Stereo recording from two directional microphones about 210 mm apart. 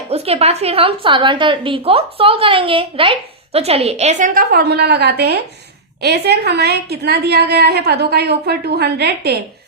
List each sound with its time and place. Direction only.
0.1 s a woman's voice: 30° right (ahead or behind); by 9.4 s 50° right (ahead or behind)